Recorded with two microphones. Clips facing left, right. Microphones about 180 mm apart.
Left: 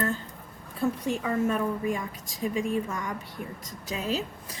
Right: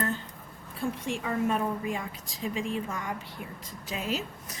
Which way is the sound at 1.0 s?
40° left (ahead or behind).